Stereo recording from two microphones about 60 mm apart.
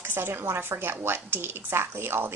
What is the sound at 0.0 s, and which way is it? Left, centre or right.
A woman's voice, right.